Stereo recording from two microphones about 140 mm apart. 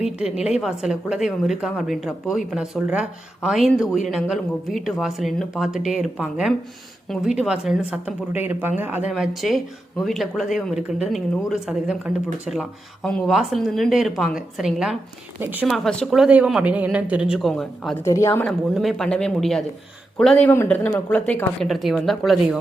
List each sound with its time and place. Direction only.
0.0 s speech: 5° right (ahead or behind)
15.4 s a man's voice: 15° right (ahead or behind)
15.6 s speech: centre (ahead or behind)
16.2 s a man's voice: 5° right (ahead or behind)
17.9 s a woman's voice: 20° left (ahead or behind)
18.4 s speech: centre (ahead or behind)